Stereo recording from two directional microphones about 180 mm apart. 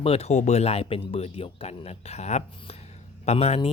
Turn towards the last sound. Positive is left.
turn(degrees=35)  # may be behind; listen again after turning